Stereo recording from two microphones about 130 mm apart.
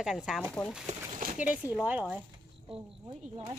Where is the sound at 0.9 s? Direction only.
85° right.